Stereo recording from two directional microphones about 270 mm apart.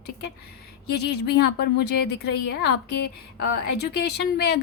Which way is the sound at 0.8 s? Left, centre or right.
Left.